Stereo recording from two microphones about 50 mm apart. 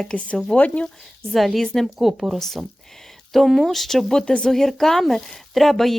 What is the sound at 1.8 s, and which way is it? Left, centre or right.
Speech, centre.